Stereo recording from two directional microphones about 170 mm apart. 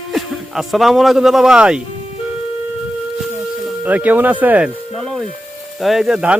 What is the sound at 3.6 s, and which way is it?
Music, 10° right (ahead or behind).